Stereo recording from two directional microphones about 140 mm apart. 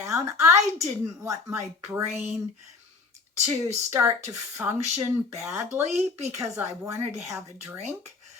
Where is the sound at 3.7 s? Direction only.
15° right (ahead or behind).